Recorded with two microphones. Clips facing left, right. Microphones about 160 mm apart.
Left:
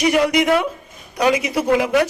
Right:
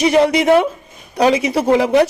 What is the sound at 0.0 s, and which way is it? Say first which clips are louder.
A man's voice: right 3 dB; 30° right (ahead or behind).